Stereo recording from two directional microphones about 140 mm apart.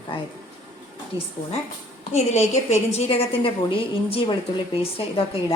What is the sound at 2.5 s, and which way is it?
Speech, 50° left (ahead or behind).